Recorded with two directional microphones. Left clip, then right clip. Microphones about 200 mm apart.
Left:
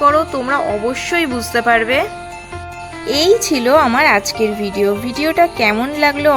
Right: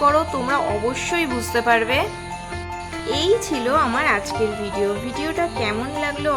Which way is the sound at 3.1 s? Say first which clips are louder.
Left 7 dB; 30° left (ahead or behind).